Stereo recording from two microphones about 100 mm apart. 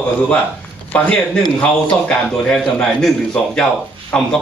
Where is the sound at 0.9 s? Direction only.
15° left (ahead or behind).